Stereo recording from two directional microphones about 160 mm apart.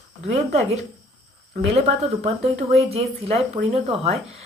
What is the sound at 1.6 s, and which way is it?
Speech, 40° right (ahead or behind).